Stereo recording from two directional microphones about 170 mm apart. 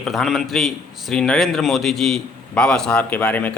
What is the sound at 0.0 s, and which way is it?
A man's voice, centre (ahead or behind).